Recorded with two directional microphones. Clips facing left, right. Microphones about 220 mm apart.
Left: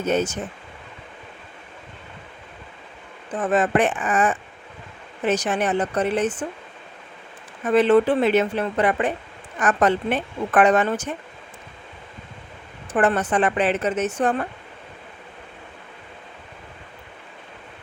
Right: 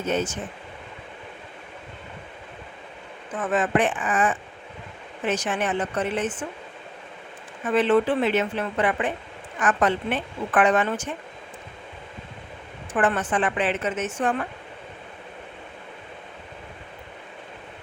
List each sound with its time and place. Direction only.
0.0 s speech: 40° left (ahead or behind)
3.3 s speech: 35° left (ahead or behind)
7.6 s speech: 40° left (ahead or behind)
12.9 s speech: 40° left (ahead or behind)